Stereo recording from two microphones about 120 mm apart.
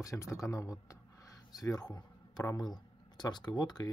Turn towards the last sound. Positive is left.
turn(degrees=35)  # may be behind; listen again after turning